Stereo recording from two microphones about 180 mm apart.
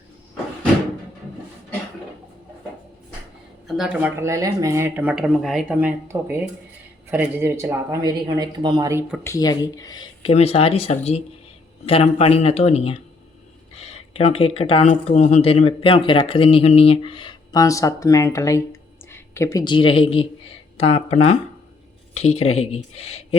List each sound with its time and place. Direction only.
3.7 s speech: 5° right (ahead or behind)
9.2 s speech: 20° left (ahead or behind)
10.3 s speech: 35° left (ahead or behind)